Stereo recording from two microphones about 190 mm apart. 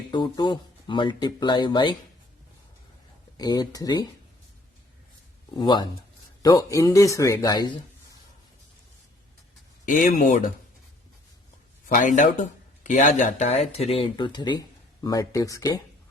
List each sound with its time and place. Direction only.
0.1 s speech: 25° left (ahead or behind)
3.3 s speech: 20° left (ahead or behind)
5.5 s a man's voice: 25° left (ahead or behind)
9.8 s speech: 45° left (ahead or behind)
11.9 s speech: 45° left (ahead or behind); by 15.7 s 15° left (ahead or behind)